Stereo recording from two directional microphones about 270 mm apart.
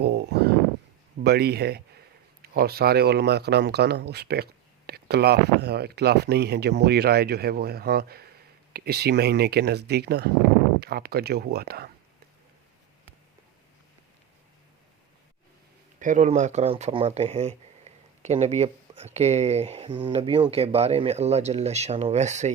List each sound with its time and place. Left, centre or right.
0.0 s a sound: right
1.2 s speech: right
16.0 s speech: right